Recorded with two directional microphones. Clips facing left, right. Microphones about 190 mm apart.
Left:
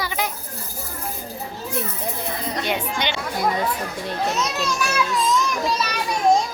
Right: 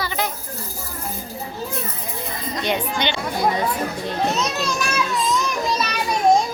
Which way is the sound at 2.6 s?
10° left (ahead or behind).